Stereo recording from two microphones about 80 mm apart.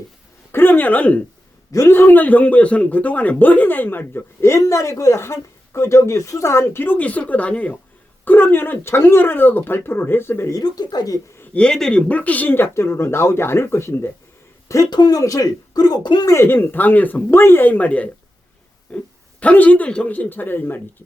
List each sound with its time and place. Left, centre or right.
0.5 s speech: left
10.5 s speech: left
11.5 s speech: centre; by 14.1 s left
14.8 s speech: left
16.2 s a man's voice: left